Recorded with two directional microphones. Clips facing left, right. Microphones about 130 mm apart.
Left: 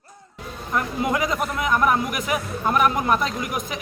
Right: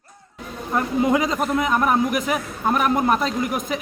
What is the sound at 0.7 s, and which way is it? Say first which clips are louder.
A man's voice: right 4 dB; 30° right (ahead or behind).